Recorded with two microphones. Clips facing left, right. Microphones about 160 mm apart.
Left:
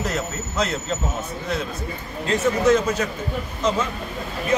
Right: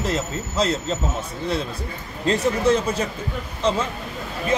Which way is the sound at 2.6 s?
30° right (ahead or behind).